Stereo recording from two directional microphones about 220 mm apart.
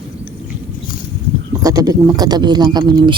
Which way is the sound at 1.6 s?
15° right (ahead or behind).